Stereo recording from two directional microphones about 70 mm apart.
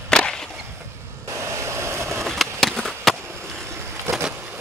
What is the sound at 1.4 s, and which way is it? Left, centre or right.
Vehicle, right.